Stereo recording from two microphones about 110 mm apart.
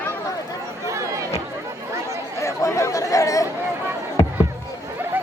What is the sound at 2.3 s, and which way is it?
Chatter, 30° left (ahead or behind).